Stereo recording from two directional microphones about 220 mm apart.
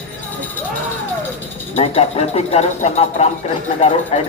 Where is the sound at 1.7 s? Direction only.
30° left (ahead or behind).